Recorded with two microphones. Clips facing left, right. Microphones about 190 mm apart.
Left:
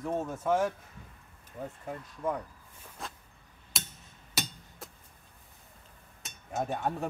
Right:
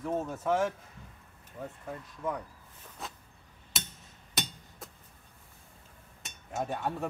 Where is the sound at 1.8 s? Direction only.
10° left (ahead or behind).